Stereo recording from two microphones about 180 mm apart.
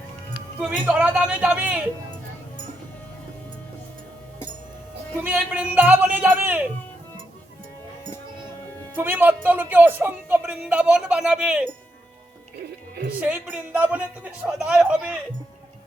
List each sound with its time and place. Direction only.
0.9 s speech: 10° right (ahead or behind)
5.2 s speech: 10° right (ahead or behind)
9.0 s speech: 10° right (ahead or behind)
13.1 s speech: 10° right (ahead or behind)